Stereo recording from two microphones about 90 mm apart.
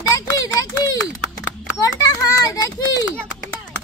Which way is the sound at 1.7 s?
45° left (ahead or behind).